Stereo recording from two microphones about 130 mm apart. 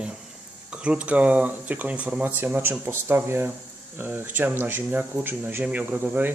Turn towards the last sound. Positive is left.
turn(degrees=-15)  # may be behind; listen again after turning